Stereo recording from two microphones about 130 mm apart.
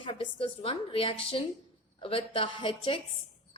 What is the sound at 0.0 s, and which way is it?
A woman's voice, 45° left (ahead or behind).